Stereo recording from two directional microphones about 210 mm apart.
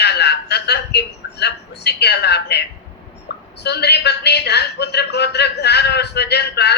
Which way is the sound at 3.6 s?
50° left (ahead or behind).